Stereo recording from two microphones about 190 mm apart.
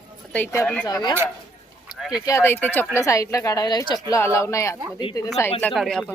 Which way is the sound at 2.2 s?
15° left (ahead or behind).